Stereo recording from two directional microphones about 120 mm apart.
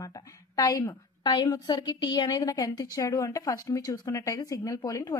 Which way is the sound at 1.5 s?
35° left (ahead or behind).